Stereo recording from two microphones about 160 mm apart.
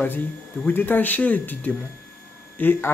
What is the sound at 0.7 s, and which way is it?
Speech, 10° left (ahead or behind).